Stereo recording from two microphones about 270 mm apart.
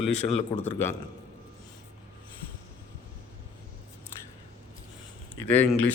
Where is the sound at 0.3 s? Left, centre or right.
Left.